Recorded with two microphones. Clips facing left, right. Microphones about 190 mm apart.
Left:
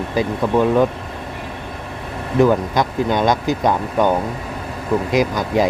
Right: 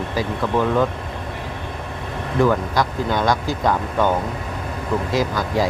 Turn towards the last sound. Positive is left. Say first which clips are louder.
# left 3 dB
turn(degrees=20)  # may be behind; listen again after turning